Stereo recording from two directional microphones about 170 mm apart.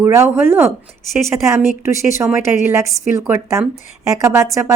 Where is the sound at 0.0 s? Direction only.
15° right (ahead or behind).